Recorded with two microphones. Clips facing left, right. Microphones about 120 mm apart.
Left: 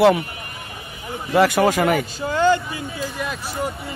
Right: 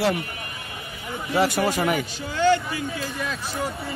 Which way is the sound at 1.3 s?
65° left (ahead or behind).